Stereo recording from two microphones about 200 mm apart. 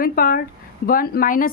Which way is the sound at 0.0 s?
45° left (ahead or behind).